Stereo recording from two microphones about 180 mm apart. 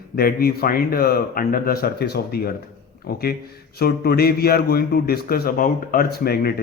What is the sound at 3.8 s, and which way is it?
Speech, 60° left (ahead or behind).